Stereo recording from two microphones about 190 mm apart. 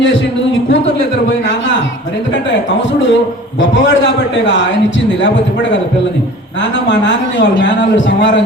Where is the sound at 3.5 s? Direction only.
75° left (ahead or behind).